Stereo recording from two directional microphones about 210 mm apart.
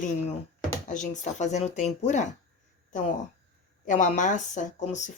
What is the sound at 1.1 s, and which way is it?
Speech, 35° left (ahead or behind).